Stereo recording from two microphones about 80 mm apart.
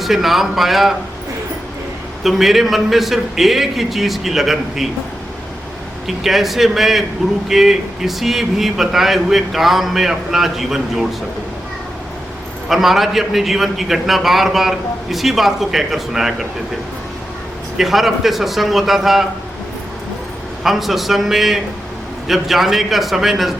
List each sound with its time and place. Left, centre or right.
0.0 s a man's voice: centre
2.2 s a man's voice: centre
6.1 s a man's voice: centre
12.6 s a man's voice: centre
17.7 s a man's voice: centre
20.7 s a man's voice: centre